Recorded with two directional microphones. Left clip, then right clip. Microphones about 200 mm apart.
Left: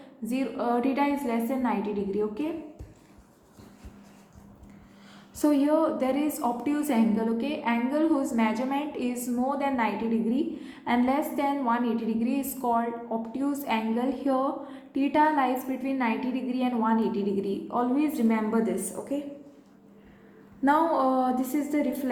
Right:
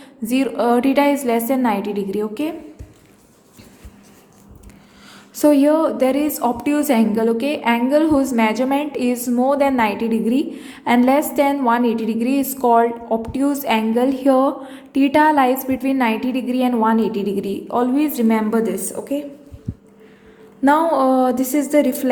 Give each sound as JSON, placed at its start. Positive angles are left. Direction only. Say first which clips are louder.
{"t": 0.3, "sound": "a woman's voice", "louder": "right 11 dB", "side_deg": -35}
{"t": 5.4, "sound": "a woman's voice", "louder": "right 9 dB", "side_deg": -30}
{"t": 20.6, "sound": "a woman's voice", "louder": "right 8 dB", "side_deg": -25}